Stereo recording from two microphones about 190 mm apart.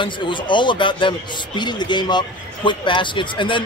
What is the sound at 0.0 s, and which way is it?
Speech, 25° left (ahead or behind).